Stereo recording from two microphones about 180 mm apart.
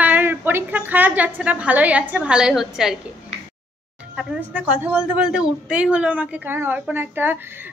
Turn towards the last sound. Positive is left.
turn(degrees=-10)  # may be behind; listen again after turning